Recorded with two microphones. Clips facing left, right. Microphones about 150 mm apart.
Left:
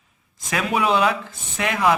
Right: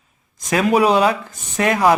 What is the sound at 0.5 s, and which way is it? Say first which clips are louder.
Speech: right 6 dB; 40° right (ahead or behind).